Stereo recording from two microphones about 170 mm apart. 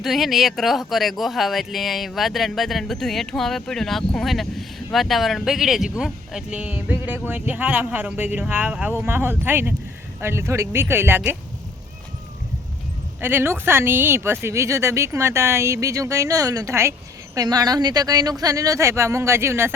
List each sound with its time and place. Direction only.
0.0 s speech: centre (ahead or behind)
13.2 s speech: 15° right (ahead or behind)